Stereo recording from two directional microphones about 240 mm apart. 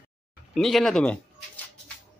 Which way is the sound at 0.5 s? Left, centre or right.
Centre.